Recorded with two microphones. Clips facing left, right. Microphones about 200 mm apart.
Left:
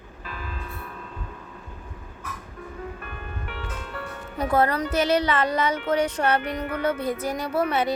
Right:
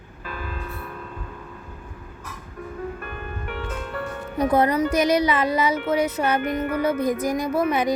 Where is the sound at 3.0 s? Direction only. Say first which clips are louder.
Right 4 dB; 50° right (ahead or behind).